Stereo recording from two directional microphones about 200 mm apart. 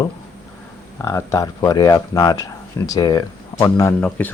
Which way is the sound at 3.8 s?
10° left (ahead or behind).